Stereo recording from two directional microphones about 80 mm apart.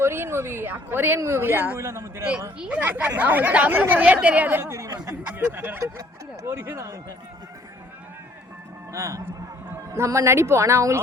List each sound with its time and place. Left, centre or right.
0.0 s speech: right
1.8 s speech: right
2.6 s speech: centre
4.6 s speech: right
5.3 s speech: right
8.9 s speech: right